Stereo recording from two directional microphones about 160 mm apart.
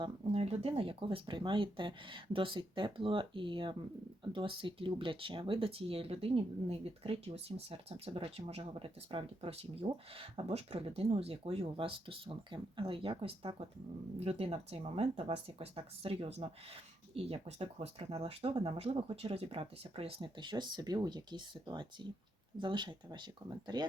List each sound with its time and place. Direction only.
0.0 s speech: 35° right (ahead or behind)